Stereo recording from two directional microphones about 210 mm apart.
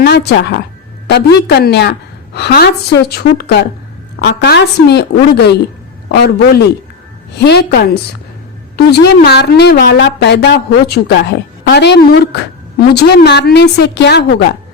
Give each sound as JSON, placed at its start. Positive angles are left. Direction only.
{"t": 0.0, "sound": "a woman's voice", "side_deg": 50}